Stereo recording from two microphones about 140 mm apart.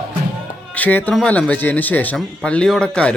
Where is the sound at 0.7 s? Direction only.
10° left (ahead or behind).